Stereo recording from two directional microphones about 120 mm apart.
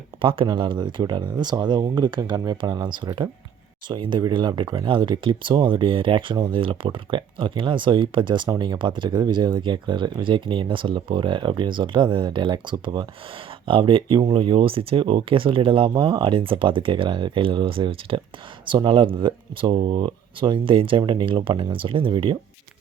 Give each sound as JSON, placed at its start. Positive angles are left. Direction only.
{"t": 0.2, "sound": "speech", "side_deg": -45}